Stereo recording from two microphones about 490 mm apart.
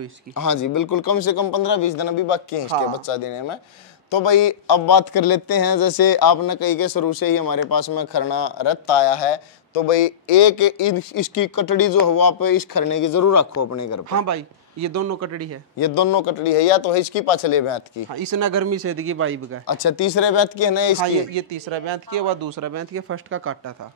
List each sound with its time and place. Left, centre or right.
0.3 s a man's voice: left
4.1 s a man's voice: left
10.4 s speech: left
10.9 s speech: left
14.1 s speech: right
15.8 s speech: left
18.3 s speech: right
19.6 s speech: left
21.0 s speech: right
22.6 s speech: right